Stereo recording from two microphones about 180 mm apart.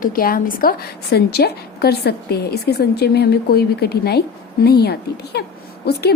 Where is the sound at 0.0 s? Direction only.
55° left (ahead or behind).